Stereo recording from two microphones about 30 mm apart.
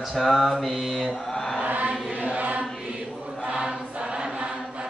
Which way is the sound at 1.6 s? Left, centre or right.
Right.